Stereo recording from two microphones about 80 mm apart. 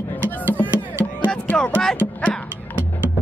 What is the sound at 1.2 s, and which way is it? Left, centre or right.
Music, centre.